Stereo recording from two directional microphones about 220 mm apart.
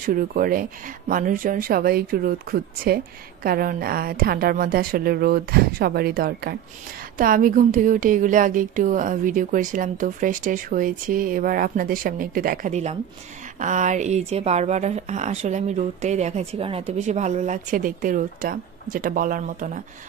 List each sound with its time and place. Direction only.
0.0 s a woman's voice: 40° right (ahead or behind)